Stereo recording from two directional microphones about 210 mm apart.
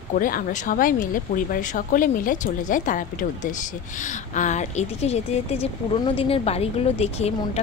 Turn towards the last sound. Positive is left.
turn(degrees=30)  # may be behind; listen again after turning